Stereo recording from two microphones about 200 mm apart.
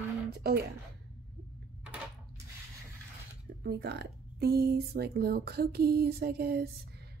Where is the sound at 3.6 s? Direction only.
55° right (ahead or behind).